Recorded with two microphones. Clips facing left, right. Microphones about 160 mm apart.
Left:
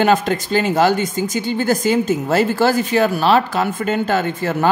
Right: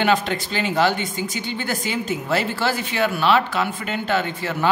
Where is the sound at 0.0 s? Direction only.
45° left (ahead or behind).